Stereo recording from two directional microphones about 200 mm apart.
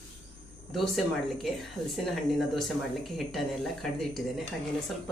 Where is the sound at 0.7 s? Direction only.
Centre (ahead or behind).